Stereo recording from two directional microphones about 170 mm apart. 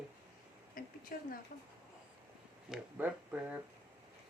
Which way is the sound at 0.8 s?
55° left (ahead or behind).